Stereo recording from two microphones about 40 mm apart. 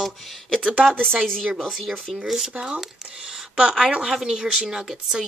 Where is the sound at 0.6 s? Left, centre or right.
Right.